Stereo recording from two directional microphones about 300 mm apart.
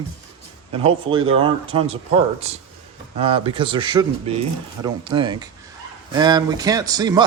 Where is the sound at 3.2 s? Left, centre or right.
Centre.